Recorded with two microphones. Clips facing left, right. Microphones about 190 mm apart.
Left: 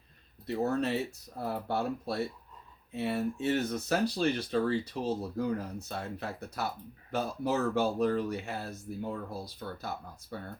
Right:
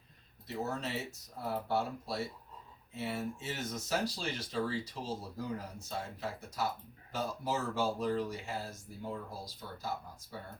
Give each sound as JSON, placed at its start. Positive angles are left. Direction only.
{"t": 0.4, "sound": "speech", "side_deg": 60}